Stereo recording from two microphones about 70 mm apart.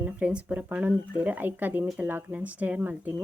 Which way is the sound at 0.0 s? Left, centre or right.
Centre.